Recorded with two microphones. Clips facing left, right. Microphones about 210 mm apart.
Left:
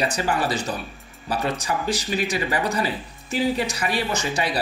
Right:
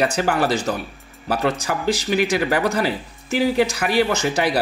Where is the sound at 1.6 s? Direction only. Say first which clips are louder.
Right 3 dB; 70° right (ahead or behind).